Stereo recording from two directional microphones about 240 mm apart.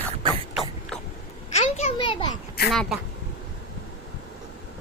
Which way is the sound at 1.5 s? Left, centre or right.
Left.